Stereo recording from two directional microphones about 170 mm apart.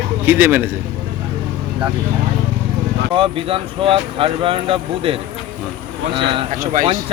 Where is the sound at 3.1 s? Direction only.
30° right (ahead or behind).